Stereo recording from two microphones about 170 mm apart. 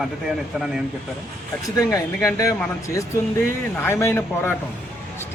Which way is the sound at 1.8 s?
20° left (ahead or behind).